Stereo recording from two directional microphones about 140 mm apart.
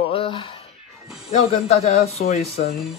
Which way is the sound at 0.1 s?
40° left (ahead or behind).